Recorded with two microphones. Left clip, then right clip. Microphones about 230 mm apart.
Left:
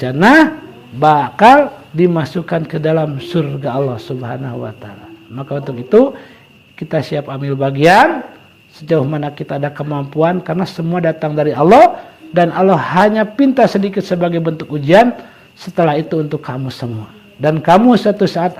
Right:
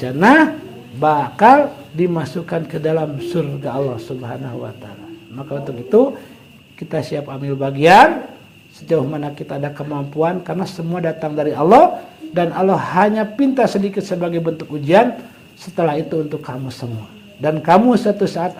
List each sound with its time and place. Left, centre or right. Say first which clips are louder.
0.0 s a man's voice: left 3 dB; left